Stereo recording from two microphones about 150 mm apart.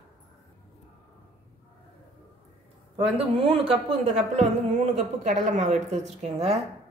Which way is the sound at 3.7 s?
40° right (ahead or behind).